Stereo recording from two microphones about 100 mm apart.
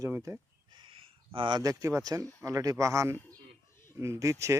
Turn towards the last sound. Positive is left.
turn(degrees=-30)  # may be behind; listen again after turning